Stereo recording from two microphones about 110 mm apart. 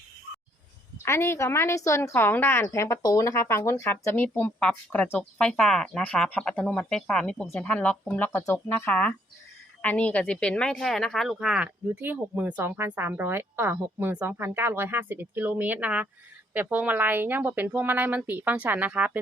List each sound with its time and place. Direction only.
1.0 s a woman's voice: 25° left (ahead or behind)
5.5 s speech: 5° left (ahead or behind)
7.4 s a woman's voice: 20° left (ahead or behind)
7.7 s a woman's voice: 10° left (ahead or behind); by 19.2 s 10° right (ahead or behind)